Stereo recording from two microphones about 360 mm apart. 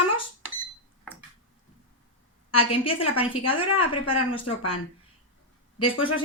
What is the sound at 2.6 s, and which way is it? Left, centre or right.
A woman's voice, centre.